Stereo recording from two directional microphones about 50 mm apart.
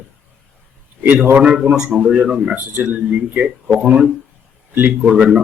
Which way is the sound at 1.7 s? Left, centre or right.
Centre.